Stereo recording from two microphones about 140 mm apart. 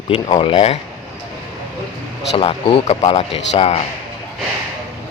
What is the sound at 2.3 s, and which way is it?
Speech, 40° left (ahead or behind).